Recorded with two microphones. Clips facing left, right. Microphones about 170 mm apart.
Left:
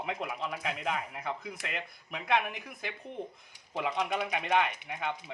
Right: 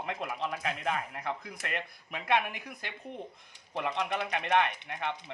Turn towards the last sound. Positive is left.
turn(degrees=5)  # may be behind; listen again after turning